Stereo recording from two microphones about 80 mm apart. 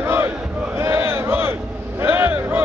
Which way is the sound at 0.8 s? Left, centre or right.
Right.